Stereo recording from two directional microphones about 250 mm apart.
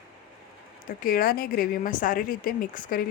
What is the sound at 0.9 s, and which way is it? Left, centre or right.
A woman's voice, left.